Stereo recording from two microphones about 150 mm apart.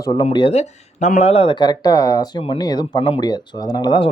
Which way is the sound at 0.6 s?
50° left (ahead or behind).